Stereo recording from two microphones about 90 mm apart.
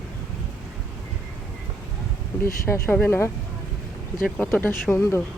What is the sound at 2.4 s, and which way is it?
Speech, 30° left (ahead or behind).